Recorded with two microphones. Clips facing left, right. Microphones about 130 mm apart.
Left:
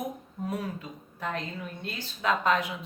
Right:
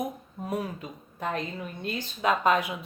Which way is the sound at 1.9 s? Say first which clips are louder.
Right 2 dB; 15° right (ahead or behind).